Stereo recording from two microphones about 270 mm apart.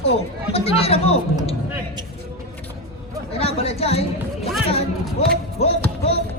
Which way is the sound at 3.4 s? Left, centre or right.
Left.